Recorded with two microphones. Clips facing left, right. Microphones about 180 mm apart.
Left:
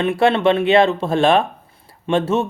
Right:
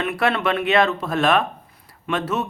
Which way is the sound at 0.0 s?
25° left (ahead or behind).